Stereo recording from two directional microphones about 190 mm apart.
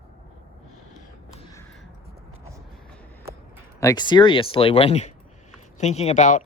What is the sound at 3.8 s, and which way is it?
Speech, 20° left (ahead or behind).